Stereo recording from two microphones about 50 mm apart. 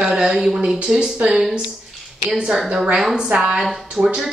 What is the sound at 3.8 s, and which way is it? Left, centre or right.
Speech, centre.